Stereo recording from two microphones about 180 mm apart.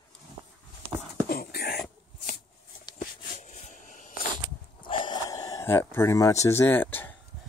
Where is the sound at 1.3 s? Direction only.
60° left (ahead or behind).